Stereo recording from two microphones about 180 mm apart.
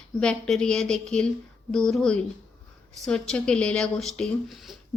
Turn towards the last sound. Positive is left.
turn(degrees=0)  # may be behind; listen again after turning